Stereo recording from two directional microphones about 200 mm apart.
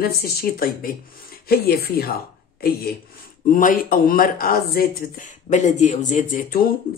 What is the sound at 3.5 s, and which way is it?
Speech, 45° left (ahead or behind).